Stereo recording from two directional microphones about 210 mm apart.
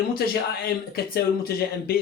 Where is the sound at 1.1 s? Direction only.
45° left (ahead or behind).